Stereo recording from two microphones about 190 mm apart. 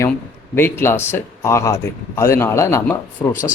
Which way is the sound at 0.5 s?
10° left (ahead or behind).